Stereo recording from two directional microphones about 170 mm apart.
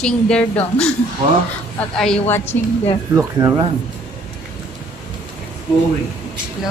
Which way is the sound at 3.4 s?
25° right (ahead or behind).